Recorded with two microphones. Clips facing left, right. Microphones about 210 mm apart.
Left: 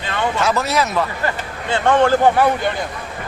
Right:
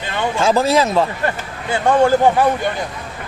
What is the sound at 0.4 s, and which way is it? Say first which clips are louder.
Speech: right 7 dB; 30° right (ahead or behind).